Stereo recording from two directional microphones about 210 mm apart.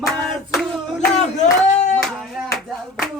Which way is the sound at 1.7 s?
35° left (ahead or behind).